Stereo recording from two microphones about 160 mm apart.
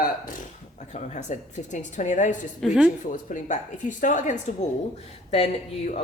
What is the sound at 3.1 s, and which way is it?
Speech, 55° left (ahead or behind).